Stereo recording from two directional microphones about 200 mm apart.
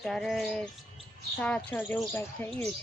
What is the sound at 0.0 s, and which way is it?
Speech, centre (ahead or behind).